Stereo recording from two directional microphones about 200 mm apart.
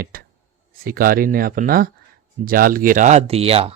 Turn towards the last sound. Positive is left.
turn(degrees=-30)  # may be behind; listen again after turning